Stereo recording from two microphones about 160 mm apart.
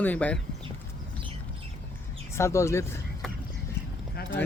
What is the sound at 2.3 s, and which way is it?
Speech, 15° left (ahead or behind).